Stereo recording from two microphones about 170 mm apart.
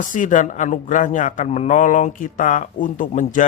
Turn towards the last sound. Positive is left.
turn(degrees=50)  # may be behind; listen again after turning